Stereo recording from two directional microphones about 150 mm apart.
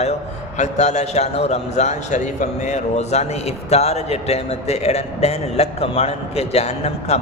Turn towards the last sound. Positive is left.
turn(degrees=45)  # may be behind; listen again after turning